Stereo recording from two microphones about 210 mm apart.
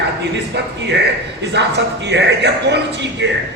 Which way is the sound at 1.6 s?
55° right (ahead or behind).